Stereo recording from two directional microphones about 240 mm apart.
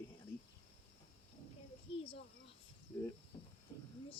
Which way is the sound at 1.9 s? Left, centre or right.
Left.